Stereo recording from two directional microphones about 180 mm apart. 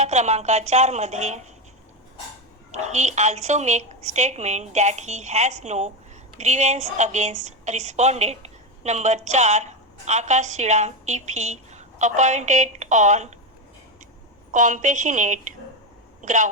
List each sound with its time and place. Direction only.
0.0 s a woman's voice: 40° right (ahead or behind)
2.7 s a woman's voice: 40° right (ahead or behind)
14.5 s a woman's voice: 45° right (ahead or behind)